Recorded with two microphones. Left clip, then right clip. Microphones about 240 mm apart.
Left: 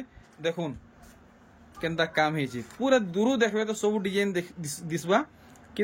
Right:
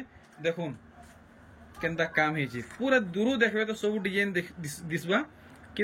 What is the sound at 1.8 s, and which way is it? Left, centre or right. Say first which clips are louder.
Speech: left 1 dB; centre.